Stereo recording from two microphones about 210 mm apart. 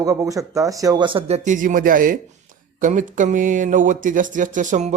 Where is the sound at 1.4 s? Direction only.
40° right (ahead or behind).